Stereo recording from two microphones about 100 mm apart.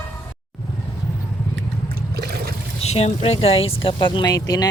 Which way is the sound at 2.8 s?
90° left.